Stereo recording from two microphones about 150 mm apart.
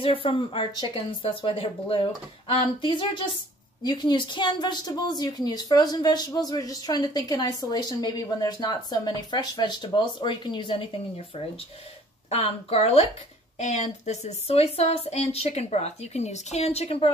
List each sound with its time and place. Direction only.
0.0 s a woman's voice: 40° left (ahead or behind)
12.3 s speech: 40° left (ahead or behind)